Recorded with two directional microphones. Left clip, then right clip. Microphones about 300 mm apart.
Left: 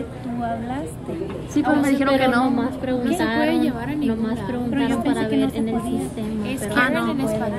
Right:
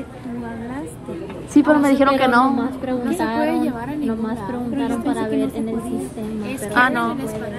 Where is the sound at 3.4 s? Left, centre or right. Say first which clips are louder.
Even; centre.